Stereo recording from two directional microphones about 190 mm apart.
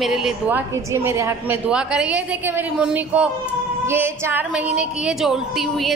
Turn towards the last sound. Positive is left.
turn(degrees=0)  # may be behind; listen again after turning